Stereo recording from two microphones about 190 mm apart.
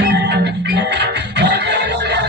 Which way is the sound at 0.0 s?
60° right (ahead or behind).